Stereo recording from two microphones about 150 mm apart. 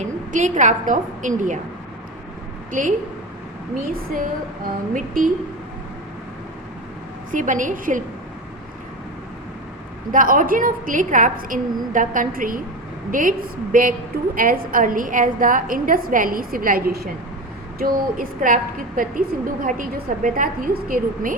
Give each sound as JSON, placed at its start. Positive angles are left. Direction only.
{"t": 0.0, "sound": "a woman's voice", "side_deg": -55}
{"t": 2.7, "sound": "a woman's voice", "side_deg": -60}
{"t": 3.8, "sound": "a woman's voice", "side_deg": -75}
{"t": 4.9, "sound": "a woman's voice", "side_deg": -65}
{"t": 7.3, "sound": "a woman's voice", "side_deg": -60}
{"t": 10.1, "sound": "a woman's voice", "side_deg": -65}
{"t": 17.7, "sound": "a woman's voice", "side_deg": -75}